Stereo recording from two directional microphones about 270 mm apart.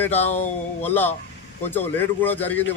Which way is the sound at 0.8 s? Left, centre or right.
Centre.